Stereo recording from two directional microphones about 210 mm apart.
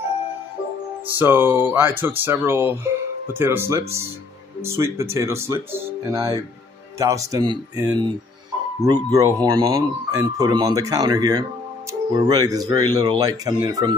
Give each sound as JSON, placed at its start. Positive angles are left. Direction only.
{"t": 1.1, "sound": "speech", "side_deg": -10}
{"t": 9.1, "sound": "speech", "side_deg": -15}